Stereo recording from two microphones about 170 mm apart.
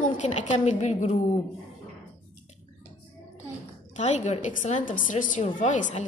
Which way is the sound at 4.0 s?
45° left (ahead or behind).